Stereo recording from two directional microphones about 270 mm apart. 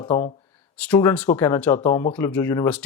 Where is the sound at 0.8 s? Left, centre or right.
Centre.